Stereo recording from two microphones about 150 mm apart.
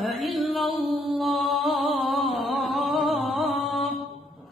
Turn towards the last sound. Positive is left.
turn(degrees=0)  # may be behind; listen again after turning